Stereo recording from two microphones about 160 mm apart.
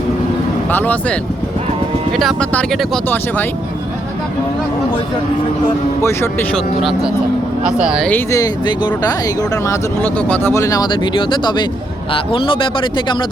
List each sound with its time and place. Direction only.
0.7 s speech: 10° left (ahead or behind)
6.0 s speech: 15° left (ahead or behind)
6.5 s speech: centre (ahead or behind)
8.1 s speech: 20° left (ahead or behind)
10.0 s speech: 10° left (ahead or behind); by 13.2 s 30° left (ahead or behind)